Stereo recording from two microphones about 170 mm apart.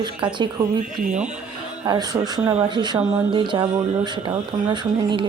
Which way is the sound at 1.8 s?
25° right (ahead or behind).